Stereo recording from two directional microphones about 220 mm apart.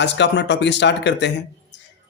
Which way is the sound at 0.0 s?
55° left (ahead or behind).